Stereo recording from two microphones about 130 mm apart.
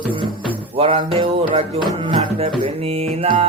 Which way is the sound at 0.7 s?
45° right (ahead or behind).